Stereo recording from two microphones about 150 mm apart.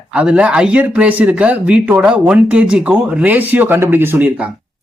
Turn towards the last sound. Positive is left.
turn(degrees=-10)  # may be behind; listen again after turning